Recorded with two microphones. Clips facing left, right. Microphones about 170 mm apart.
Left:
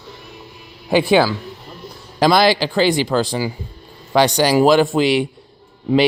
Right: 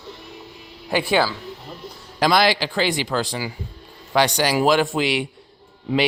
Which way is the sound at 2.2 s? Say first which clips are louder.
Left 4 dB; 35° left (ahead or behind).